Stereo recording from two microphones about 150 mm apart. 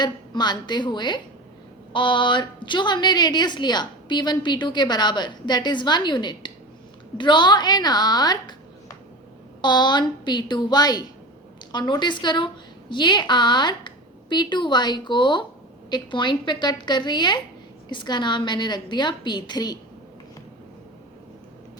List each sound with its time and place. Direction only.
0.0 s a woman's voice: 30° left (ahead or behind)